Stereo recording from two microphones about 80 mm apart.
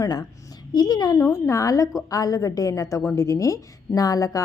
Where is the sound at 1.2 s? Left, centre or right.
Left.